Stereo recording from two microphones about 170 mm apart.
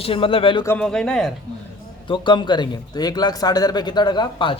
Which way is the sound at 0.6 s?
10° left (ahead or behind).